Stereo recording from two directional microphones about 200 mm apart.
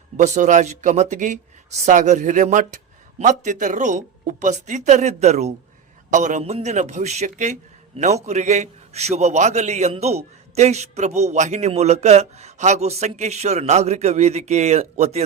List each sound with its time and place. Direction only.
0.2 s a man's voice: 40° right (ahead or behind)